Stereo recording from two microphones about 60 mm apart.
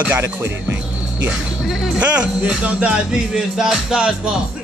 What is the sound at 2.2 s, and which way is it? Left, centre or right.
Music, centre.